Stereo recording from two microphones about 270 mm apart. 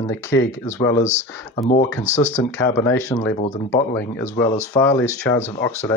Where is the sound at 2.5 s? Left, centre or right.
Centre.